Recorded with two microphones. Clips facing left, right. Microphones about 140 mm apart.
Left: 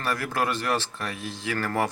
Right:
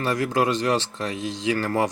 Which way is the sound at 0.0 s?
20° right (ahead or behind).